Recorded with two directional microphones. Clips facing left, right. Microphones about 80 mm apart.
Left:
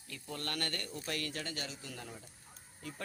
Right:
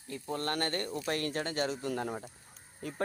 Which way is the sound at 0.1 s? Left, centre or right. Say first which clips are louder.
Right 7 dB; right.